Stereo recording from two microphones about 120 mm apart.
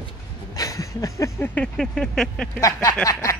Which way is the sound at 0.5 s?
30° left (ahead or behind).